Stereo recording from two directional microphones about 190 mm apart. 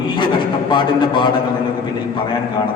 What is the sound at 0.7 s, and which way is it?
Speech, 25° left (ahead or behind).